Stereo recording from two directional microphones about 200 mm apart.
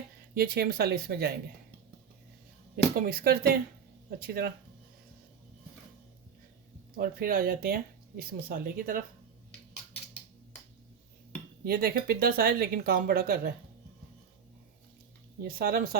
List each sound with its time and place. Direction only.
0.3 s speech: 50° right (ahead or behind)
2.7 s speech: 50° right (ahead or behind)
6.9 s speech: 45° right (ahead or behind)
11.6 s speech: 50° right (ahead or behind)
15.4 s speech: 45° right (ahead or behind)